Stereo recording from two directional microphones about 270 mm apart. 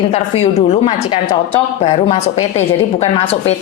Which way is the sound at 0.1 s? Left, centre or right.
Left.